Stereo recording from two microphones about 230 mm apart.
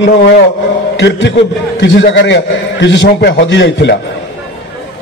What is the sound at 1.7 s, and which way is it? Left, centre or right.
A man's voice, left.